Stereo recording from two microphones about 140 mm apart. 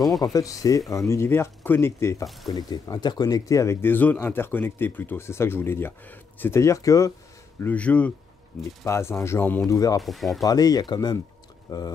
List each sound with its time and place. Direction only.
0.2 s speech: 25° left (ahead or behind)
2.5 s speech: 30° left (ahead or behind)
7.6 s speech: 10° left (ahead or behind)
9.8 s speech: 25° left (ahead or behind)
10.0 s speech: centre (ahead or behind)
10.4 s speech: 25° left (ahead or behind)